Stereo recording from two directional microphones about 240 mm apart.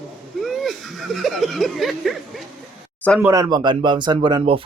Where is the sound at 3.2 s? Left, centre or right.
Centre.